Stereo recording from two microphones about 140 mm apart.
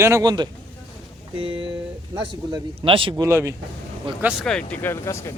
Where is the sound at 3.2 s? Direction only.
20° right (ahead or behind).